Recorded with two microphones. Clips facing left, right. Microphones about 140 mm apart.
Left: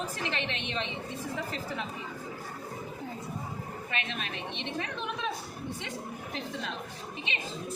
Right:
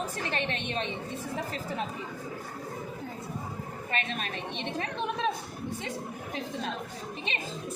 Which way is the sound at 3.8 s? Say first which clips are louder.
Right 4 dB; 45° right (ahead or behind).